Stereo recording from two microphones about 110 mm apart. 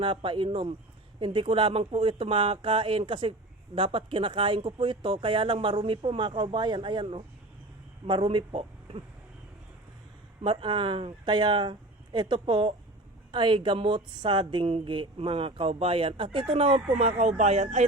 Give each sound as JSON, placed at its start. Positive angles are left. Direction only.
{"t": 0.0, "sound": "speech", "side_deg": -50}
{"t": 10.4, "sound": "speech", "side_deg": -45}